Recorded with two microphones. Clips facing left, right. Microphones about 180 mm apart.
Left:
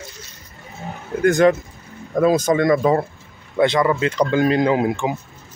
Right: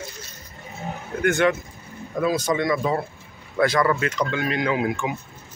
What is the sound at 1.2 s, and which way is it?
Speech, 35° left (ahead or behind).